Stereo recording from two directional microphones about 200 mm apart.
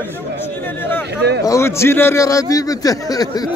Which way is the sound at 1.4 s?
15° left (ahead or behind).